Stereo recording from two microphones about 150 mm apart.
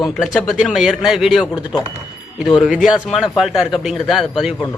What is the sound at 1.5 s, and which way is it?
Speech, 30° left (ahead or behind).